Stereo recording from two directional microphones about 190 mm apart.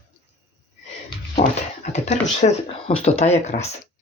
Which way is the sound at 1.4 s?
40° left (ahead or behind).